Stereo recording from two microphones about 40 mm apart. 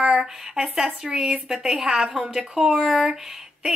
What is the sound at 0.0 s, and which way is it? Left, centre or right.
A woman's voice, right.